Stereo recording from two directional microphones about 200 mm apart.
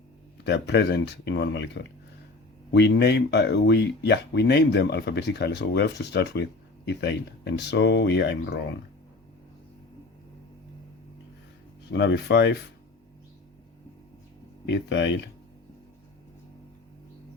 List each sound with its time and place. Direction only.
0.4 s speech: 55° left (ahead or behind)
11.9 s speech: 60° left (ahead or behind)
14.7 s speech: 60° left (ahead or behind)